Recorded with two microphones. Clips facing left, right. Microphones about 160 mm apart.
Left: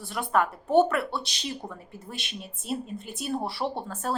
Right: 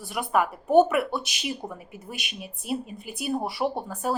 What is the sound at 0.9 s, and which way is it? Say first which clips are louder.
Speech: right 3 dB; 15° right (ahead or behind).